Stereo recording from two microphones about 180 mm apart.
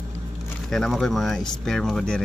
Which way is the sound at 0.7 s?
Centre (ahead or behind).